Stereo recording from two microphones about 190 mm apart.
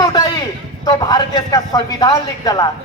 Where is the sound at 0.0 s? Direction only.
20° left (ahead or behind).